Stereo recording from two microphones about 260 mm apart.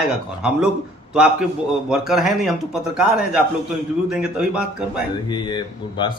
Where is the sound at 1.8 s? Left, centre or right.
Centre.